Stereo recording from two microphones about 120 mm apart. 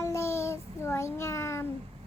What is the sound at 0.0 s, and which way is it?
Child singing, 25° left (ahead or behind).